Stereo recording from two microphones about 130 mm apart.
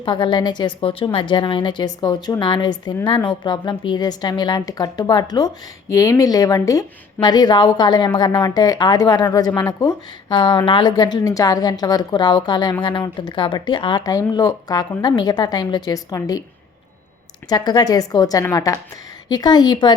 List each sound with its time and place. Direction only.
0.0 s a woman's voice: 35° left (ahead or behind)
14.0 s speech: 30° left (ahead or behind)
17.5 s a woman's voice: 30° left (ahead or behind)